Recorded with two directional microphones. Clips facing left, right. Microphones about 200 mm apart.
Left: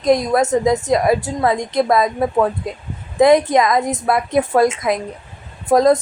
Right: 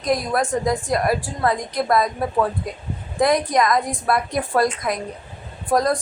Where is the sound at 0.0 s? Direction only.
25° left (ahead or behind).